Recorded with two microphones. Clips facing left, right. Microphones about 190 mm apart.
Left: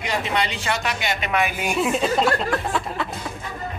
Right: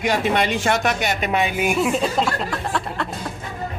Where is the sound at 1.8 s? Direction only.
Centre (ahead or behind).